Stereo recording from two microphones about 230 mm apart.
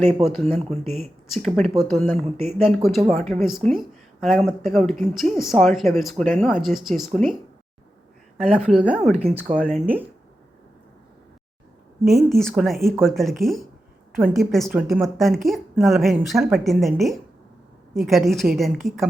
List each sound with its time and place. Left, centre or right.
0.3 s a woman's voice: centre
2.1 s speech: right
2.6 s a woman's voice: centre
8.4 s a woman's voice: centre
9.8 s speech: centre
12.0 s a woman's voice: centre